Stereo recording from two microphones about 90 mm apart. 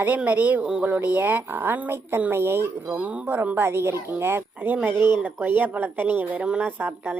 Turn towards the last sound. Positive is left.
turn(degrees=-20)  # may be behind; listen again after turning